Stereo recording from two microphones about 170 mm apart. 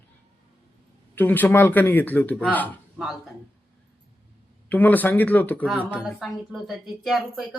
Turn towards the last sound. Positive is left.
turn(degrees=0)  # may be behind; listen again after turning